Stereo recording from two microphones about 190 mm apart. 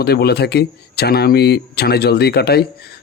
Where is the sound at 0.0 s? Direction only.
55° left (ahead or behind).